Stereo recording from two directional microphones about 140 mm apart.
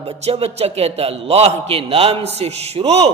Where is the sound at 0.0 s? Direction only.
45° right (ahead or behind).